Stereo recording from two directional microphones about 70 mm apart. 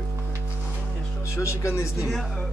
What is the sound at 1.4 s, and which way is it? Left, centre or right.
Speech, left.